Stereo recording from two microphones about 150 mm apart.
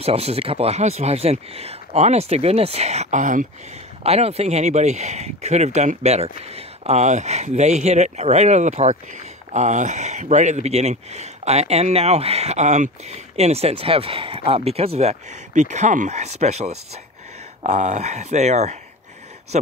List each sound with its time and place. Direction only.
0.0 s speech: 45° right (ahead or behind); by 3.4 s 60° right (ahead or behind)
4.0 s speech: 45° right (ahead or behind)